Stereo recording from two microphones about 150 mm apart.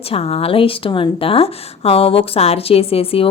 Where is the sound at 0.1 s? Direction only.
40° left (ahead or behind).